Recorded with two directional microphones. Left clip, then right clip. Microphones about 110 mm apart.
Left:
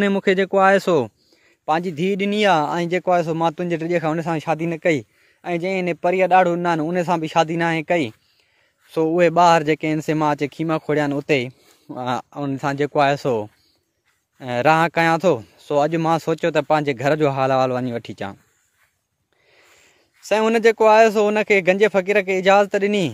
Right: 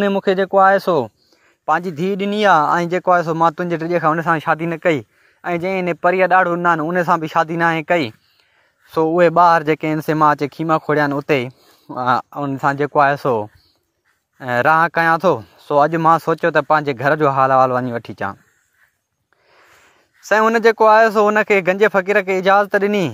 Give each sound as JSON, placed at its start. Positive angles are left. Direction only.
{"t": 0.0, "sound": "speech", "side_deg": 30}
{"t": 1.7, "sound": "a man's voice", "side_deg": 10}
{"t": 2.6, "sound": "speech", "side_deg": 0}
{"t": 4.0, "sound": "a man's voice", "side_deg": 15}
{"t": 20.2, "sound": "speech", "side_deg": 5}